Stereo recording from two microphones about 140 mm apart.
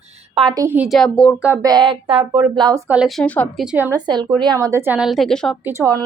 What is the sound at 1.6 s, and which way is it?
Speech, 30° right (ahead or behind).